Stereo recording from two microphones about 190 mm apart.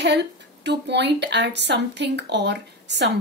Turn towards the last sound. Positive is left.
turn(degrees=-65)  # may be behind; listen again after turning